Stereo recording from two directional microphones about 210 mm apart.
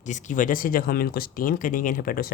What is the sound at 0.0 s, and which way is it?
Speech, 35° left (ahead or behind).